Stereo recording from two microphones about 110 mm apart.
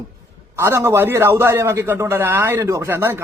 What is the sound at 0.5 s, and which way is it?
Speech, 25° right (ahead or behind).